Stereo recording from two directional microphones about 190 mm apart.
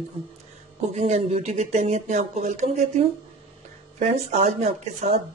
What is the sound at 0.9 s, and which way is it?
A woman's voice, 35° right (ahead or behind).